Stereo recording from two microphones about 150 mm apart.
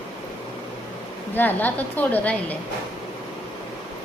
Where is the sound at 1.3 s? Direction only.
10° left (ahead or behind).